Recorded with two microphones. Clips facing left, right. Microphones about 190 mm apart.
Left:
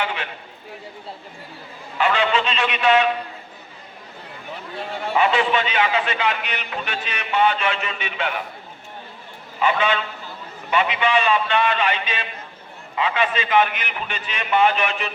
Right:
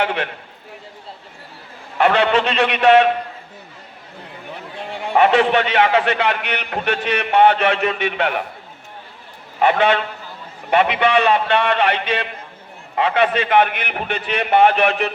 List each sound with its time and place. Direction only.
0.0 s a man's voice: 60° right (ahead or behind)
2.0 s a man's voice: 65° right (ahead or behind)
5.1 s a man's voice: 60° right (ahead or behind)
9.6 s a man's voice: 60° right (ahead or behind)